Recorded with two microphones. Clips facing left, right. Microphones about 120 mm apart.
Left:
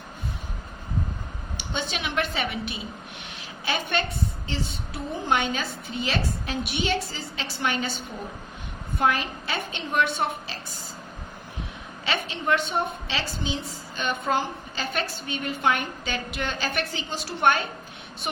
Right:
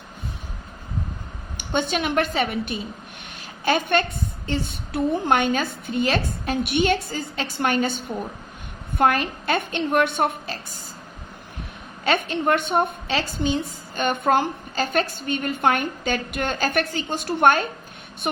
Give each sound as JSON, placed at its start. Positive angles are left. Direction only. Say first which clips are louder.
{"t": 1.5, "sound": "a woman's voice", "louder": "right 8 dB", "side_deg": -50}
{"t": 12.0, "sound": "a woman's voice", "louder": "right 6 dB", "side_deg": -50}